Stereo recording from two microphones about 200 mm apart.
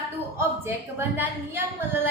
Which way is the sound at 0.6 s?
10° right (ahead or behind).